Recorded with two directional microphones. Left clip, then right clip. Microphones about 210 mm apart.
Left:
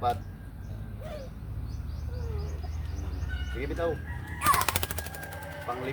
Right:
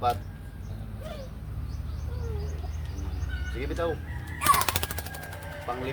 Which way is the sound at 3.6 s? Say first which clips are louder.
Right 1 dB; 10° right (ahead or behind).